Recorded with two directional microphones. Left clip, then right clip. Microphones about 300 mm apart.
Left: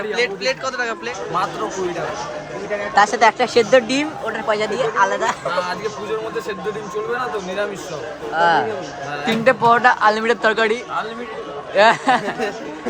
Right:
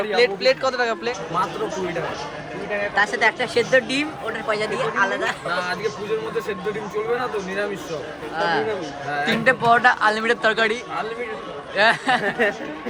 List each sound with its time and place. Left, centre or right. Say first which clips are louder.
0.2 s a man's voice: right 4 dB; centre
2.9 s speech: left 6 dB; left
8.4 s a man's voice: left 6 dB; left
9.2 s speech: left 3 dB; centre